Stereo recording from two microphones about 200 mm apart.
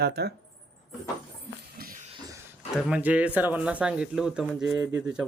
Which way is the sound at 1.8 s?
45° right (ahead or behind).